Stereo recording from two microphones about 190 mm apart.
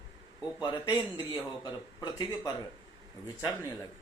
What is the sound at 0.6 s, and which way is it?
Speech, 20° left (ahead or behind).